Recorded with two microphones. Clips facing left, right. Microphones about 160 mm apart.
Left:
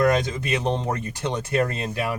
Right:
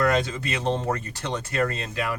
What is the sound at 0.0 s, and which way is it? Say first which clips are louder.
Speech: left 2 dB; 15° left (ahead or behind).